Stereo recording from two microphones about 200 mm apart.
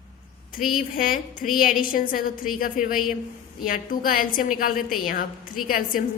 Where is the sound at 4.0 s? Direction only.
45° left (ahead or behind).